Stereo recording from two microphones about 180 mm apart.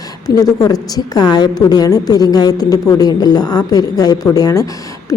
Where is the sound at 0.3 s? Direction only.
20° left (ahead or behind).